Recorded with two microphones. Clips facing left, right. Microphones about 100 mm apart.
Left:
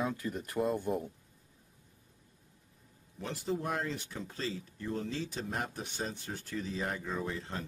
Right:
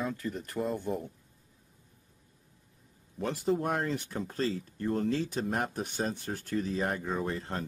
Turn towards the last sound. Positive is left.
turn(degrees=-50)  # may be behind; listen again after turning